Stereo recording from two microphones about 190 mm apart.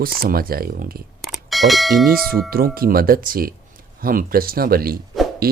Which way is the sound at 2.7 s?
50° right (ahead or behind).